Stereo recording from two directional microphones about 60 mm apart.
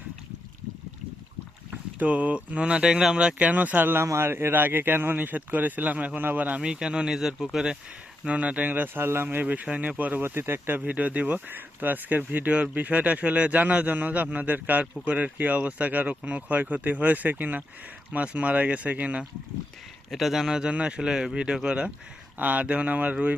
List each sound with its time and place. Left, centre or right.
1.7 s speech: right
3.3 s speech: right
3.9 s speech: right
6.6 s speech: centre
8.3 s speech: right
10.8 s speech: right
20.1 s speech: centre; by 23.1 s right